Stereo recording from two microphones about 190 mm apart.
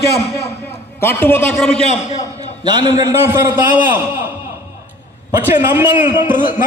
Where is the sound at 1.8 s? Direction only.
35° left (ahead or behind).